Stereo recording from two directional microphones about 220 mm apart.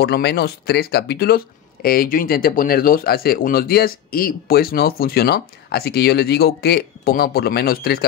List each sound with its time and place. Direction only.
0.0 s speech: 50° left (ahead or behind)